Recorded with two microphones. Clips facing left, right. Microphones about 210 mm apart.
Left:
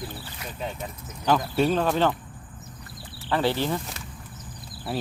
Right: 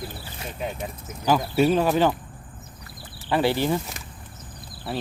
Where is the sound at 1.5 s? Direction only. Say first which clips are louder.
Right 5 dB; 10° right (ahead or behind).